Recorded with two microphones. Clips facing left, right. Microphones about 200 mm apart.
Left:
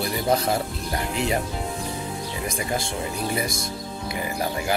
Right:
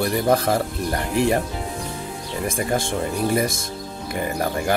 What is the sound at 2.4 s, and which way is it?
Speech, 50° right (ahead or behind).